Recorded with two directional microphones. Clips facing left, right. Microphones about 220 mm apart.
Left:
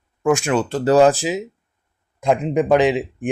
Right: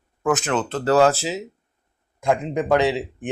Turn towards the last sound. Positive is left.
turn(degrees=15)  # may be behind; listen again after turning